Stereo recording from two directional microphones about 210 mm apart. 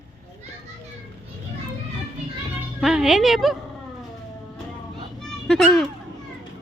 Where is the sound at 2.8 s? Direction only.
Centre (ahead or behind).